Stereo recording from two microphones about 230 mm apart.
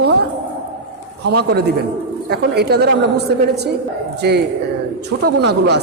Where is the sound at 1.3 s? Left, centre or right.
Right.